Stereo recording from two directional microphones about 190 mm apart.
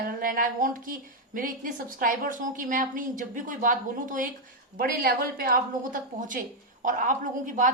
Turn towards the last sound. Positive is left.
turn(degrees=-45)  # may be behind; listen again after turning